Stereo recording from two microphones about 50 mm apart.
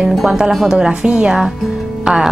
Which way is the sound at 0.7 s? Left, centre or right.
Centre.